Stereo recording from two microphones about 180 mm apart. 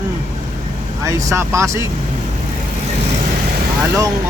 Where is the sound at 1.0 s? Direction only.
15° right (ahead or behind).